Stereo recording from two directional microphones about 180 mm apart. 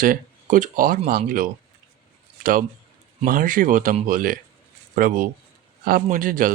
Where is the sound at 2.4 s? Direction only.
50° right (ahead or behind).